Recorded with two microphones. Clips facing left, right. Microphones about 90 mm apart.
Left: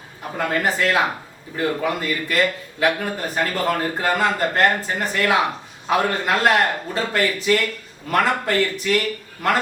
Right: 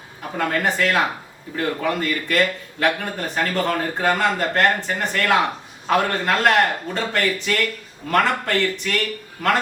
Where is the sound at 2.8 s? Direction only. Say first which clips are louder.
Left 1 dB; 5° left (ahead or behind).